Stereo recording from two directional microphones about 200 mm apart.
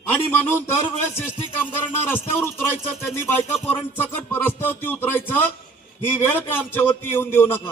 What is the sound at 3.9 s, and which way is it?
A man's voice, 10° left (ahead or behind).